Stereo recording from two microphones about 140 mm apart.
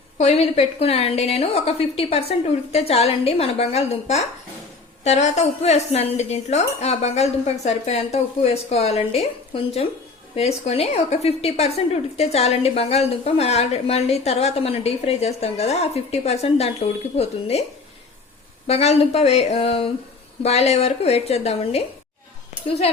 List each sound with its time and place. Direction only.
0.2 s speech: 50° left (ahead or behind)
18.7 s speech: 50° left (ahead or behind)